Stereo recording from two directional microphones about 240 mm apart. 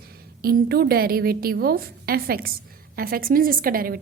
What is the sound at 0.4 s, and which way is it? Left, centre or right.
Speech, right.